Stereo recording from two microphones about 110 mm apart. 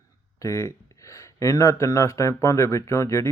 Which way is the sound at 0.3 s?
25° left (ahead or behind).